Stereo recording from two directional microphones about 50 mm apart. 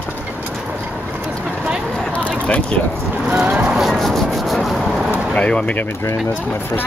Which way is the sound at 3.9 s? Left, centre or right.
Centre.